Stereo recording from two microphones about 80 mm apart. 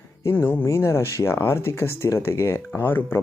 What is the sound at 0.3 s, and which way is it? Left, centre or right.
Speech, left.